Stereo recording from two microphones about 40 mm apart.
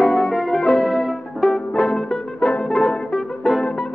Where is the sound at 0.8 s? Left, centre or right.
Centre.